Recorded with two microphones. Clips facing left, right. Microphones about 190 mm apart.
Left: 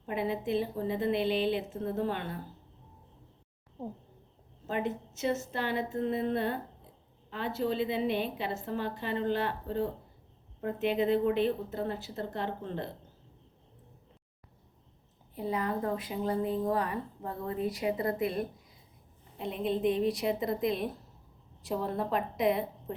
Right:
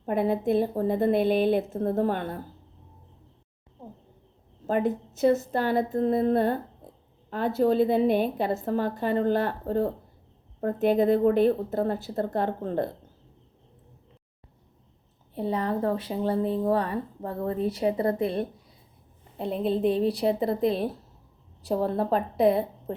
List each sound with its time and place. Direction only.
0.0 s a woman's voice: 50° right (ahead or behind)
4.6 s a woman's voice: 40° right (ahead or behind)
15.4 s speech: 30° right (ahead or behind)